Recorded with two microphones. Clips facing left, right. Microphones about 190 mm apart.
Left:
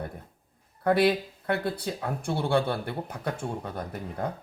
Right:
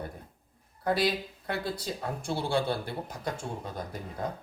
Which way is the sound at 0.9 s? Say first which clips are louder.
Left 5 dB; 60° left (ahead or behind).